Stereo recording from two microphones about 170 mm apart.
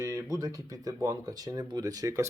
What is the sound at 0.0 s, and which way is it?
Speech, 15° right (ahead or behind).